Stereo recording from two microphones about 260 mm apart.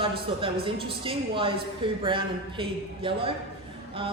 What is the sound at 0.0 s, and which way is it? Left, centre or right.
A woman's voice, centre.